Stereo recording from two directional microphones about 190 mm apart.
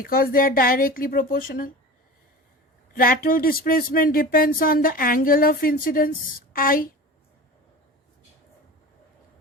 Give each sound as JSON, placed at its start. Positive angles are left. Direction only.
{"t": 0.0, "sound": "speech", "side_deg": 50}
{"t": 2.9, "sound": "speech", "side_deg": 50}